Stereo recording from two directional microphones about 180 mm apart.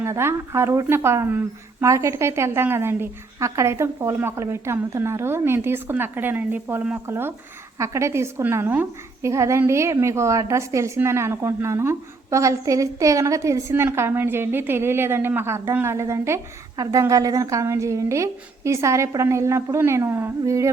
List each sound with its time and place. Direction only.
0.0 s a woman's voice: 15° right (ahead or behind)